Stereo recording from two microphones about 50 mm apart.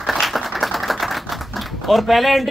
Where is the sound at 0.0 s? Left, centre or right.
Centre.